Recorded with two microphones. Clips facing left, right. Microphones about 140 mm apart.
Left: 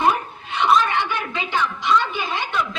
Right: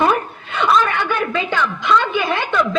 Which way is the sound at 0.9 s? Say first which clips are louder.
Right 4 dB; 50° right (ahead or behind).